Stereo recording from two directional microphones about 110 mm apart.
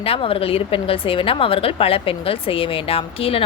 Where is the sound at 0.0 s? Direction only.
60° left (ahead or behind).